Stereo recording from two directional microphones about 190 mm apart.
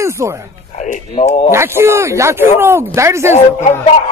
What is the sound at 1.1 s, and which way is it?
Speech, 30° left (ahead or behind).